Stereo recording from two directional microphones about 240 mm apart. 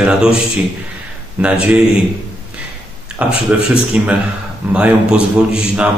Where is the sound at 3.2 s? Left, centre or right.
Centre.